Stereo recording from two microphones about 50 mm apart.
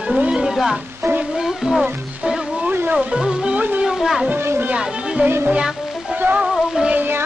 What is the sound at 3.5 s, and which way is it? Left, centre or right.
Music, right.